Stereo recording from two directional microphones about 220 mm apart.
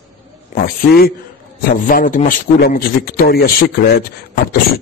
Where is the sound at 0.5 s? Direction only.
45° left (ahead or behind).